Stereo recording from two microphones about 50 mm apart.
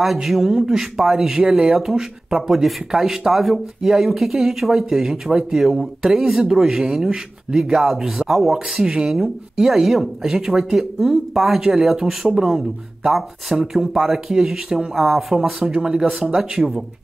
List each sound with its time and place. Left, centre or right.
0.0 s speech: centre
15.7 s speech: centre